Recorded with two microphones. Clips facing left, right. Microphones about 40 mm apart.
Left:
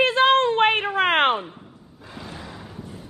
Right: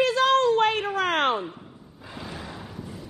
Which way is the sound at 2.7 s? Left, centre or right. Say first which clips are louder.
Even; left.